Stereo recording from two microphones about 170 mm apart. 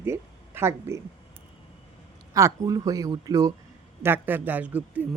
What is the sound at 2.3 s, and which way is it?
Speech, 20° right (ahead or behind).